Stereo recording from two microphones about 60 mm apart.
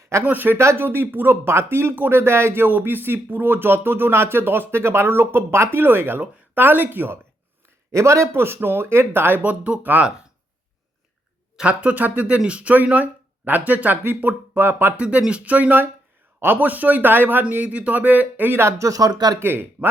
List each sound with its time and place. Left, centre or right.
0.0 s a sound: right
0.3 s speech: right
7.9 s speech: right
9.4 s speech: right
11.5 s speech: right
14.9 s speech: right
18.8 s speech: right
19.4 s speech: right